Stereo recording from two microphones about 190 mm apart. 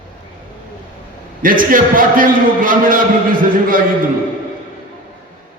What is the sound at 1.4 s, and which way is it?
A man's voice, 45° right (ahead or behind).